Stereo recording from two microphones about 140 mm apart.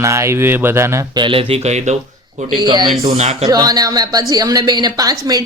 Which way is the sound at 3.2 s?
50° right (ahead or behind).